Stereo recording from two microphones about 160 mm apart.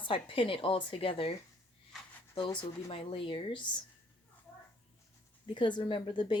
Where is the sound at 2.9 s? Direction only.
35° left (ahead or behind).